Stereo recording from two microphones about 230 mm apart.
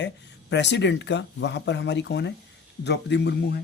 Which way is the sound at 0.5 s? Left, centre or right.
Left.